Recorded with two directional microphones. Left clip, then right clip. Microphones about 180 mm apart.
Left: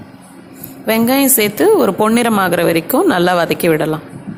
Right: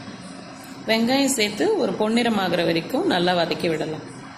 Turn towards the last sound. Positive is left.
turn(degrees=55)  # may be behind; listen again after turning